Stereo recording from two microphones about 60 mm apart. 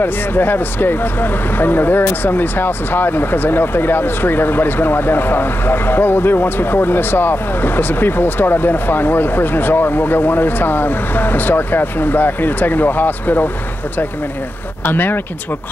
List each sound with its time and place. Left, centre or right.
0.0 s speech: left
14.9 s speech: left